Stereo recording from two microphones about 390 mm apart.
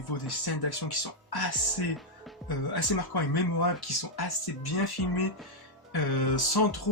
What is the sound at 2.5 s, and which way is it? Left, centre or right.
Speech, left.